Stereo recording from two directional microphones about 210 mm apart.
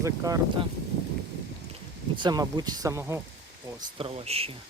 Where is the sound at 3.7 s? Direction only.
25° right (ahead or behind).